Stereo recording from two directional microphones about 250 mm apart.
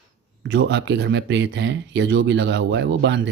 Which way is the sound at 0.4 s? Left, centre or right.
Right.